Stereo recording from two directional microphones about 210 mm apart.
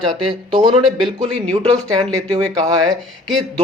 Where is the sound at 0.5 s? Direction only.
20° right (ahead or behind).